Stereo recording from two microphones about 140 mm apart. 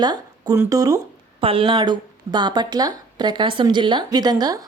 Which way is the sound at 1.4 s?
40° right (ahead or behind).